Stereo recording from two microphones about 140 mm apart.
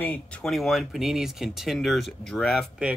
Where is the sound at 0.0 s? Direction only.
10° left (ahead or behind).